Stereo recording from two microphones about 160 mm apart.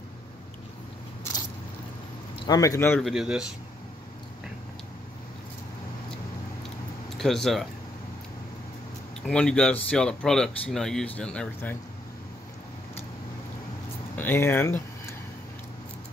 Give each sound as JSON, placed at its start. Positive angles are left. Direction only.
{"t": 2.4, "sound": "speech", "side_deg": 20}
{"t": 3.0, "sound": "speech", "side_deg": 0}
{"t": 7.2, "sound": "speech", "side_deg": 0}
{"t": 9.2, "sound": "speech", "side_deg": 5}
{"t": 14.1, "sound": "a sound", "side_deg": 15}